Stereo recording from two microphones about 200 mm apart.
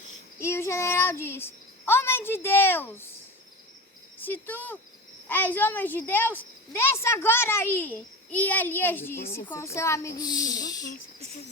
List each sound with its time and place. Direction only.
0.3 s speech: 15° left (ahead or behind)
4.3 s speech: 10° left (ahead or behind)